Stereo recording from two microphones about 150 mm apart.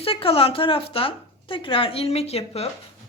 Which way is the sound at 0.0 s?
40° left (ahead or behind).